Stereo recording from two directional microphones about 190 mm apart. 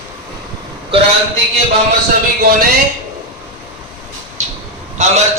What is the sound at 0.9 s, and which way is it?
Speech, 25° right (ahead or behind).